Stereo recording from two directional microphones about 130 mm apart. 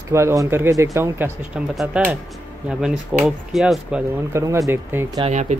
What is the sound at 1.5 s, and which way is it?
Speech, 10° right (ahead or behind).